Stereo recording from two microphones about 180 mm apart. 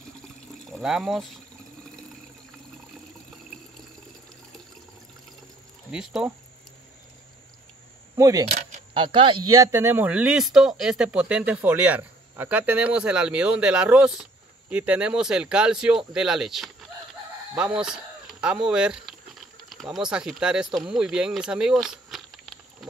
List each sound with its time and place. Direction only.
0.7 s speech: centre (ahead or behind)
5.9 s speech: 5° right (ahead or behind)
8.2 s speech: 20° right (ahead or behind)
8.5 s speech: 35° right (ahead or behind); by 20.6 s 5° right (ahead or behind)
20.8 s a sound: 5° right (ahead or behind)